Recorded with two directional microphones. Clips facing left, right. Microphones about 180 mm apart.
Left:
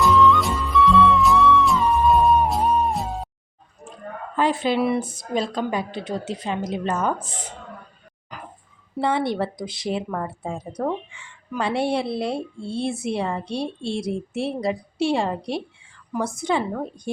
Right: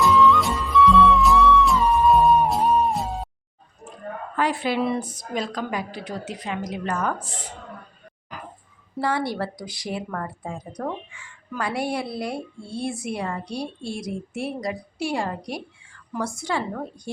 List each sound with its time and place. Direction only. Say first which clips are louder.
0.0 s music: even; centre (ahead or behind)
4.4 s a woman's voice: left 3 dB; 25° left (ahead or behind)
9.0 s a woman's voice: left 3 dB; 25° left (ahead or behind)